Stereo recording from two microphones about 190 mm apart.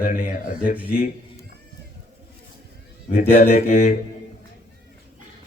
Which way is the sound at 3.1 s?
40° left (ahead or behind).